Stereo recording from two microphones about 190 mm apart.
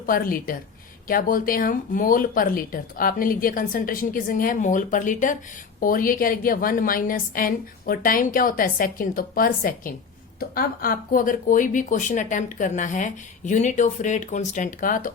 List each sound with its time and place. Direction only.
0.0 s speech: 50° left (ahead or behind)